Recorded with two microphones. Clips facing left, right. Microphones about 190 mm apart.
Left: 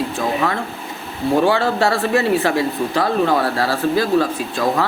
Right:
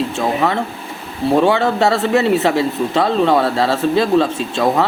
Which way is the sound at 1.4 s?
20° right (ahead or behind).